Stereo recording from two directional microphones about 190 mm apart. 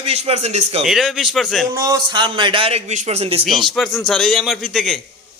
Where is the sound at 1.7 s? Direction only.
15° right (ahead or behind); by 3.4 s 30° right (ahead or behind).